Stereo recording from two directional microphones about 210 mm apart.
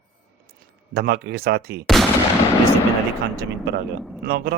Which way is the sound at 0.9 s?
50° right (ahead or behind).